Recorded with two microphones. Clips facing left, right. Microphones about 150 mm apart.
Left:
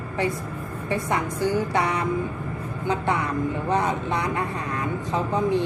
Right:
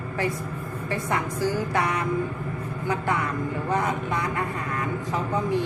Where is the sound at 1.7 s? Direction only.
20° left (ahead or behind).